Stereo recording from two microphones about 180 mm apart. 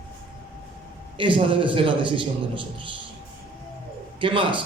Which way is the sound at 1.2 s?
30° right (ahead or behind).